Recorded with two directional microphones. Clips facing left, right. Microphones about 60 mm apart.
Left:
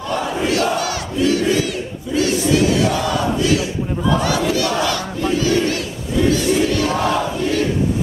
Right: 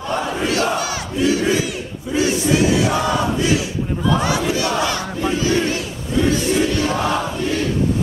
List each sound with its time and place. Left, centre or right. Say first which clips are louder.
0.2 s crowd: left 2 dB; centre
3.3 s battle cry: left 1 dB; right
6.5 s crowd: left 1 dB; right